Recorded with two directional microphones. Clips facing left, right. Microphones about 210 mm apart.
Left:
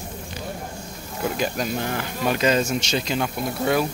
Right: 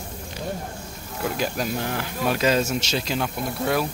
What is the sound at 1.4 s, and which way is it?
Speech, centre (ahead or behind).